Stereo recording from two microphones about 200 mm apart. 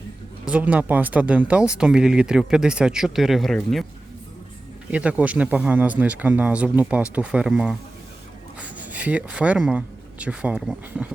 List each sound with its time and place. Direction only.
0.4 s speech: 5° right (ahead or behind)
4.9 s speech: 5° right (ahead or behind)